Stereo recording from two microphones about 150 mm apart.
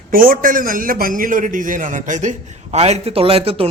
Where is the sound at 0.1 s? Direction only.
70° right (ahead or behind).